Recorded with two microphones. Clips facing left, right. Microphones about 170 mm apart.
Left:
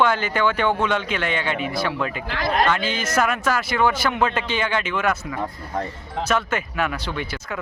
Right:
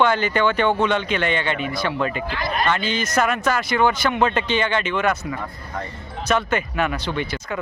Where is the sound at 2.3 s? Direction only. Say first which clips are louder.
Left 3 dB; 85° left.